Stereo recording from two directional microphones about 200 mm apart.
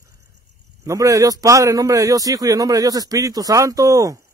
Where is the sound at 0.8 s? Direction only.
15° right (ahead or behind).